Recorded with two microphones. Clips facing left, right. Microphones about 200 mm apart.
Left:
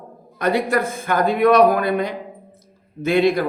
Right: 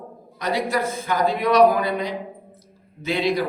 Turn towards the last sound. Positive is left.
turn(degrees=50)  # may be behind; listen again after turning